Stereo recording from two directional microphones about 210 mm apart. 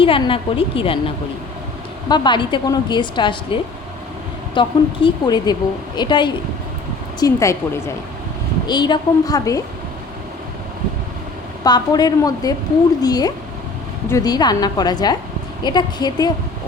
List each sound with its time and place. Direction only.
0.0 s a woman's voice: 25° left (ahead or behind)
11.6 s a woman's voice: 20° left (ahead or behind)